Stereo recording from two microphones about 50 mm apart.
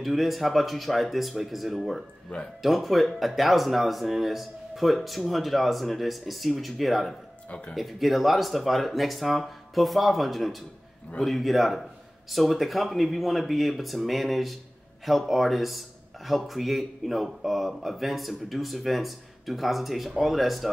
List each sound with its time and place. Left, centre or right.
0.0 s speech: centre
7.4 s speech: left
7.7 s speech: centre